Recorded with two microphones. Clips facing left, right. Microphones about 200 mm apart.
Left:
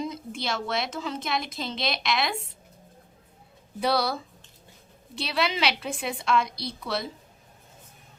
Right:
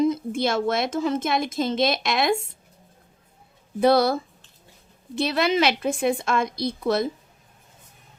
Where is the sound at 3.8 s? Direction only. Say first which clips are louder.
Right 8 dB; 50° right (ahead or behind).